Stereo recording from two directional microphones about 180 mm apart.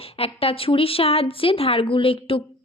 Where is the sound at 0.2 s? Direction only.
30° left (ahead or behind).